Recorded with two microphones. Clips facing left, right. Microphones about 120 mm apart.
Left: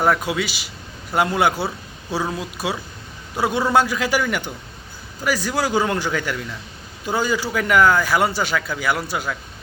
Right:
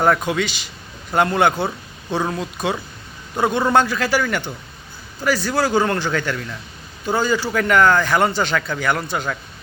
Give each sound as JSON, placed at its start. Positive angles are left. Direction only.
{"t": 0.0, "sound": "speech", "side_deg": 5}